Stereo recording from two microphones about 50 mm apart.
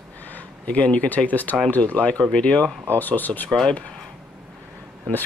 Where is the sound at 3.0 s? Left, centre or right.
Left.